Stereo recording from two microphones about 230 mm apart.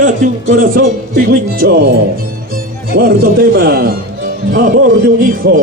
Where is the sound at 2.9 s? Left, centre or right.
Right.